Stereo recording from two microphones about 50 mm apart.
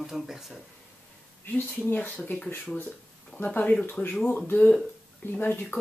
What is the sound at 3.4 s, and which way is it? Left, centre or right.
Speech, left.